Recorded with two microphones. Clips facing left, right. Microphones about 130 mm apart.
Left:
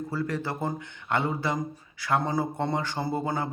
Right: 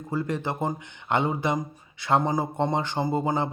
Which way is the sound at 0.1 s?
20° right (ahead or behind).